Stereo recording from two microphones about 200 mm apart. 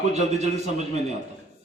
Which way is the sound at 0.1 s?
35° right (ahead or behind).